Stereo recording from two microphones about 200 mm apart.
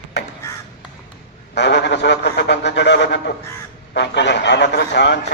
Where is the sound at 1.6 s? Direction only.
60° left (ahead or behind).